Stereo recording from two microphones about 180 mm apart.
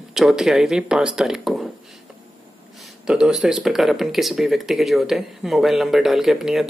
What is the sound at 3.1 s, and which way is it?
Speech, 5° right (ahead or behind).